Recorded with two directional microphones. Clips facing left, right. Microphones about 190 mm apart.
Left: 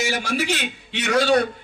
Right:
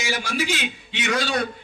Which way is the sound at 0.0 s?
60° left (ahead or behind).